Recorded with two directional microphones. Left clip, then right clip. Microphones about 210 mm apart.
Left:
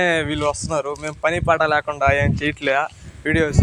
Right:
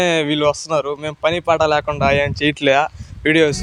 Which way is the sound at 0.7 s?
25° right (ahead or behind).